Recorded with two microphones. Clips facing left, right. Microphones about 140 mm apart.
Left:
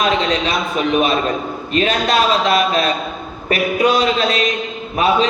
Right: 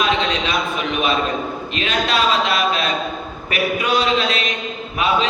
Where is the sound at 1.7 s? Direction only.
40° left (ahead or behind).